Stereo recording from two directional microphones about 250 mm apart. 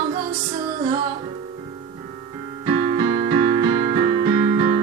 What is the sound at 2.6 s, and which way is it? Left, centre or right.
Keyboard, right.